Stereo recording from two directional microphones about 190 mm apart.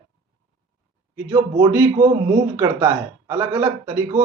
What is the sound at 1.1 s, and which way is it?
Speech, 15° right (ahead or behind).